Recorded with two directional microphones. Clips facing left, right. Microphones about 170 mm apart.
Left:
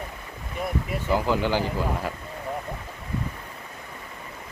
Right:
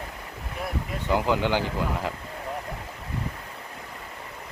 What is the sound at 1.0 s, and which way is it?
Speech, 15° right (ahead or behind).